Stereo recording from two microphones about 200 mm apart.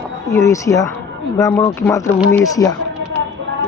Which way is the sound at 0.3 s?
15° left (ahead or behind).